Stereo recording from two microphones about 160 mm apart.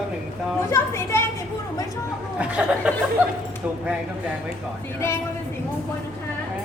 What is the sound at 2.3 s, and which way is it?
Speech, 10° right (ahead or behind).